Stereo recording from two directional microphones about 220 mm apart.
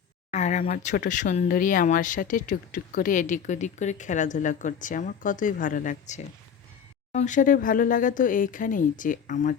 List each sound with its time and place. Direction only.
0.3 s speech: 30° left (ahead or behind)